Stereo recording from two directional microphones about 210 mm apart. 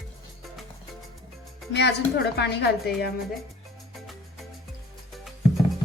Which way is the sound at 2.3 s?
50° left (ahead or behind).